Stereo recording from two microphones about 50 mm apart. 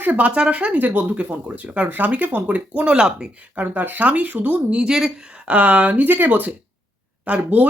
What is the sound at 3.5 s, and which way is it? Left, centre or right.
Speech, right.